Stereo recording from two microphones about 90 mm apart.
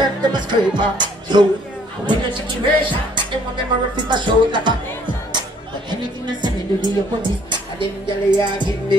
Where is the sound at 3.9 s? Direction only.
55° right (ahead or behind).